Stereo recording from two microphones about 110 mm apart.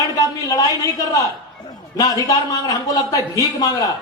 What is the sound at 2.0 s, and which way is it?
A man's voice, 35° left (ahead or behind).